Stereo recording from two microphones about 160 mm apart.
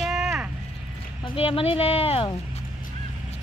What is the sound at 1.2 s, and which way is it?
Speech, 35° left (ahead or behind).